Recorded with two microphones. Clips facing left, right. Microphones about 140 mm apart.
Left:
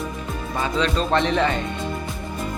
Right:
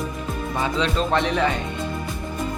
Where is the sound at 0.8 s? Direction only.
15° right (ahead or behind).